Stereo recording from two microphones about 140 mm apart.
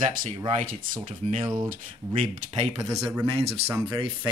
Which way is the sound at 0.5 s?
60° right (ahead or behind).